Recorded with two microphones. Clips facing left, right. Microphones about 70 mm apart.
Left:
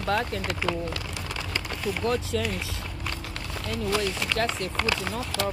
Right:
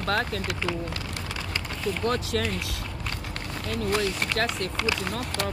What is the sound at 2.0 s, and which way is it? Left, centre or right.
Speech, right.